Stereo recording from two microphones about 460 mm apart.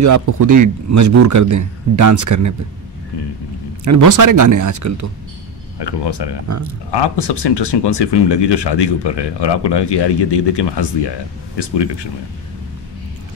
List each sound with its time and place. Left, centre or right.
0.0 s a man's voice: right
3.8 s a man's voice: right
5.8 s speech: left
6.4 s a man's voice: right
6.9 s speech: left